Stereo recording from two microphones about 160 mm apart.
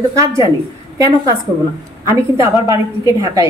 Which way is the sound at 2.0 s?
20° right (ahead or behind).